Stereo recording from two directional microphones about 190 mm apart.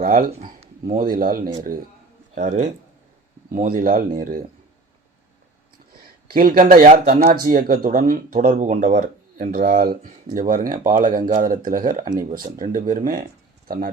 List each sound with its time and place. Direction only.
0.0 s speech: 50° right (ahead or behind)
6.2 s speech: 50° right (ahead or behind)
12.0 s speech: 20° right (ahead or behind)
12.5 s speech: 45° right (ahead or behind)